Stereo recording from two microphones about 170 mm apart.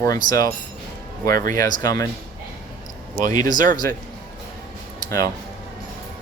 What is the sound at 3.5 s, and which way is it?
Speech, 50° right (ahead or behind).